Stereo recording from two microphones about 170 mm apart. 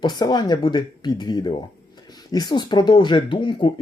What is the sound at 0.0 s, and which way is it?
Speech, 25° left (ahead or behind).